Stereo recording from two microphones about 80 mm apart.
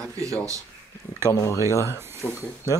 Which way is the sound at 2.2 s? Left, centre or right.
Centre.